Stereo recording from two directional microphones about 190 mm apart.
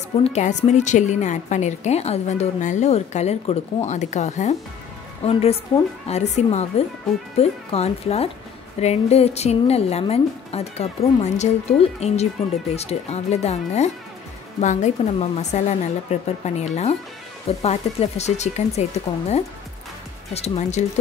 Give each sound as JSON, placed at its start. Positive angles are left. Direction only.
{"t": 0.2, "sound": "a woman's voice", "side_deg": 35}